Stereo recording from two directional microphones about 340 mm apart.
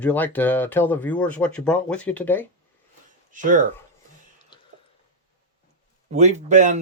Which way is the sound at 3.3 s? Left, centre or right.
Right.